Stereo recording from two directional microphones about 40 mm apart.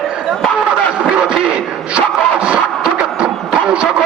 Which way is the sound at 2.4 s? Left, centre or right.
Right.